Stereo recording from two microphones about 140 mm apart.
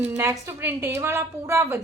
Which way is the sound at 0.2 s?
15° right (ahead or behind).